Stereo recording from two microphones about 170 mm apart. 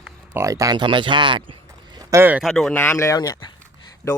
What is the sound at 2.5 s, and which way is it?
Speech, 5° left (ahead or behind).